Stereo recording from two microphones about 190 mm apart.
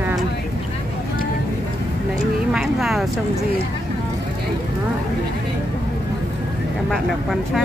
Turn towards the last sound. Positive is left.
turn(degrees=0)  # may be behind; listen again after turning